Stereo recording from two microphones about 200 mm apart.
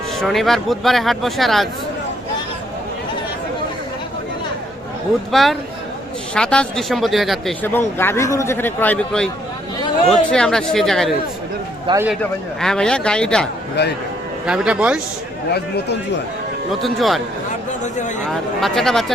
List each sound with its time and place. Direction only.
0.2 s speech: centre (ahead or behind)
5.3 s speech: centre (ahead or behind)
11.9 s a man's voice: 25° right (ahead or behind)
12.2 s speech: 5° left (ahead or behind)
13.8 s speech: 55° left (ahead or behind)
14.4 s speech: 5° right (ahead or behind)
15.5 s speech: 55° left (ahead or behind)
16.8 s speech: centre (ahead or behind)
18.3 s speech: centre (ahead or behind)